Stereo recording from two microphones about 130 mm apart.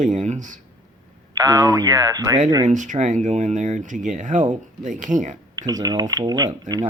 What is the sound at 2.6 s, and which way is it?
Speech, 75° right (ahead or behind).